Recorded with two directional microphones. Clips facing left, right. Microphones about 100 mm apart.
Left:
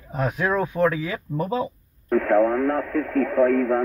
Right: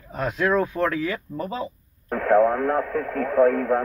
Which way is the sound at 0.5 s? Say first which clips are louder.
Left 3 dB; 10° left (ahead or behind).